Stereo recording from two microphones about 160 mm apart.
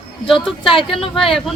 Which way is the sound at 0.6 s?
35° left (ahead or behind).